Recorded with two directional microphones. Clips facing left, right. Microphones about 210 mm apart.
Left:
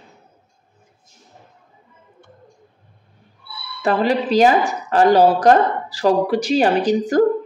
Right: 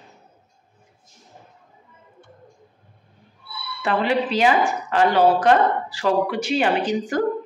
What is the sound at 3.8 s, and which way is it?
Speech, 40° left (ahead or behind).